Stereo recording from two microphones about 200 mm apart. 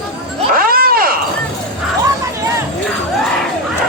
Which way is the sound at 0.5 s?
45° right (ahead or behind).